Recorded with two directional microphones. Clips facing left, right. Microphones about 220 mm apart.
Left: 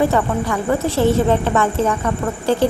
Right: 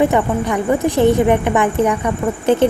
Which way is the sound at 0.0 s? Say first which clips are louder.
Right 2 dB; 20° right (ahead or behind).